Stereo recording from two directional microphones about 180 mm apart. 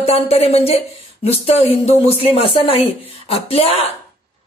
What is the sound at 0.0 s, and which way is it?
Speech, 35° left (ahead or behind).